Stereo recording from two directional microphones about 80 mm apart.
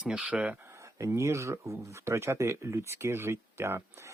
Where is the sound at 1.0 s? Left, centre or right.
Right.